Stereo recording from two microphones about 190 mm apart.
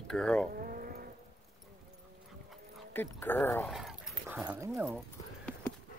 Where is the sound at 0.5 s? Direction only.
50° right (ahead or behind).